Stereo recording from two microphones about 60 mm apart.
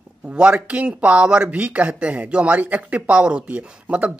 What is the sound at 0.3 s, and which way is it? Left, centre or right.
Speech, right.